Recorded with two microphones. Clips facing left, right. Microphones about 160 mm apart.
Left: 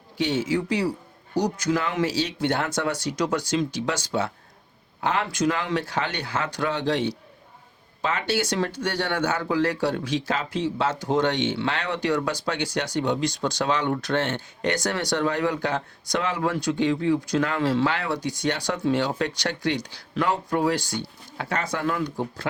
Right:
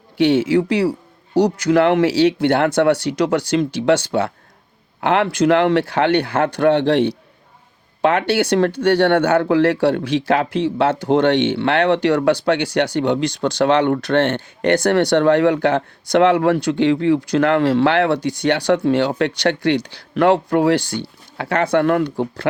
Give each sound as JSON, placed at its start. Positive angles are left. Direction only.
{"t": 0.2, "sound": "speech", "side_deg": -65}